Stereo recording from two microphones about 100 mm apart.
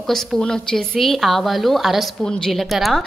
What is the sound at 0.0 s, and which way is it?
A woman's voice, 5° left (ahead or behind).